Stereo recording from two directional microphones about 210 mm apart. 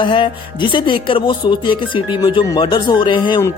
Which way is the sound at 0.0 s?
25° left (ahead or behind).